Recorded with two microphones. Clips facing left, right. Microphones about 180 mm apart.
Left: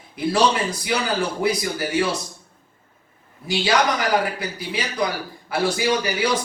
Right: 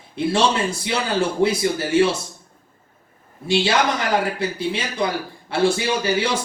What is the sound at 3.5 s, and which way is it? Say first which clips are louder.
A man's voice: right 1 dB; 25° right (ahead or behind).